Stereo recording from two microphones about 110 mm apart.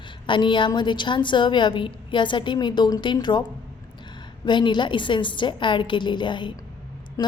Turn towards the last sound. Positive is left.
turn(degrees=30)  # may be behind; listen again after turning